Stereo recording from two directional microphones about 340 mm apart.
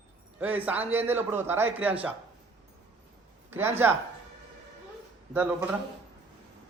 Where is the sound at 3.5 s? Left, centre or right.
Centre.